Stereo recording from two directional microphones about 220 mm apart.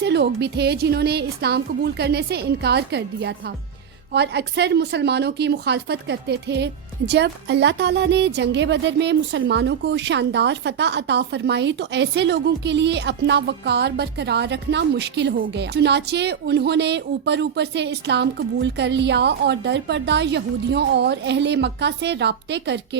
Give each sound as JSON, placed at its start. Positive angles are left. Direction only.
{"t": 0.0, "sound": "speech", "side_deg": -50}